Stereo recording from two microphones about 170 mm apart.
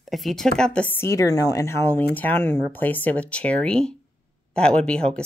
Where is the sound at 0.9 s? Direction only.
15° left (ahead or behind).